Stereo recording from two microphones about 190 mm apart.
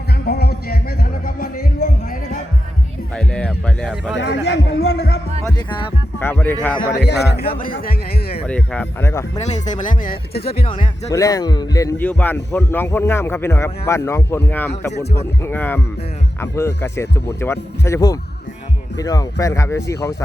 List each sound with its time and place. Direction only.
0.3 s music: 55° left (ahead or behind)
3.2 s music: 5° left (ahead or behind)
4.2 s a man's voice: 65° left (ahead or behind)
5.5 s speech: 25° left (ahead or behind)
6.1 s a man's voice: 10° left (ahead or behind)
6.9 s a man's voice: 60° left (ahead or behind)
8.4 s a man's voice: 5° left (ahead or behind)
9.4 s speech: 35° left (ahead or behind)
10.7 s speech: 35° left (ahead or behind)
11.1 s a man's voice: 20° left (ahead or behind)